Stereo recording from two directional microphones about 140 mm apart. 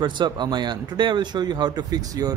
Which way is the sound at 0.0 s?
35° right (ahead or behind).